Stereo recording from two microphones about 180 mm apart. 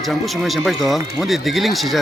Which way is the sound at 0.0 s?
Centre (ahead or behind).